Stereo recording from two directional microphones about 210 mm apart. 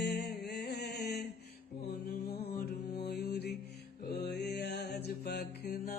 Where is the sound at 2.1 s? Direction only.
30° left (ahead or behind).